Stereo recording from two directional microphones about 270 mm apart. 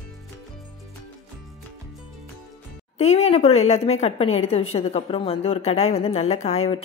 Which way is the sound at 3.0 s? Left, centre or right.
Left.